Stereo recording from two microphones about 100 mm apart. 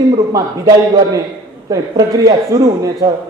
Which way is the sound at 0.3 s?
35° right (ahead or behind).